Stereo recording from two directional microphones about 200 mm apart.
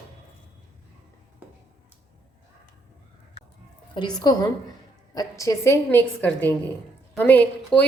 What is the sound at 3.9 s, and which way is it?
A woman's voice, 20° left (ahead or behind).